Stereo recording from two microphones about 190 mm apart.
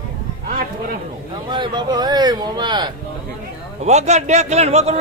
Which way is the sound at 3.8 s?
35° right (ahead or behind).